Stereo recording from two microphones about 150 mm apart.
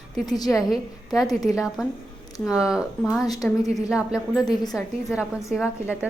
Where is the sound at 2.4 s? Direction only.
5° right (ahead or behind).